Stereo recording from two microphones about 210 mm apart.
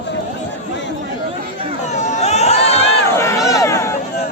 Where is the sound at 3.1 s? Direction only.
15° left (ahead or behind).